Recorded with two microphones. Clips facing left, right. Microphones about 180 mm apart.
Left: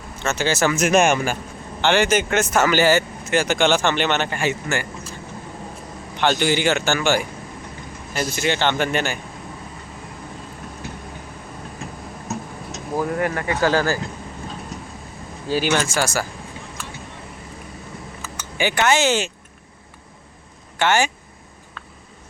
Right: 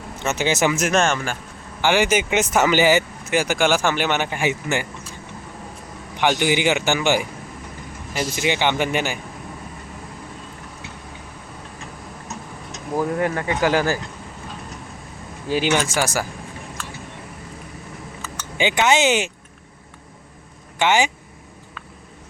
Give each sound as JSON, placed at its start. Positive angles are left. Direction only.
{"t": 0.2, "sound": "speech", "side_deg": -20}
{"t": 0.7, "sound": "speech", "side_deg": -5}
{"t": 0.9, "sound": "speech", "side_deg": 10}
{"t": 1.8, "sound": "speech", "side_deg": -10}
{"t": 6.1, "sound": "speech", "side_deg": -15}
{"t": 8.2, "sound": "speech", "side_deg": -15}
{"t": 12.3, "sound": "a sound", "side_deg": 5}
{"t": 13.1, "sound": "speech", "side_deg": -20}
{"t": 15.4, "sound": "speech", "side_deg": -20}
{"t": 18.5, "sound": "speech", "side_deg": -20}
{"t": 20.7, "sound": "speech", "side_deg": -15}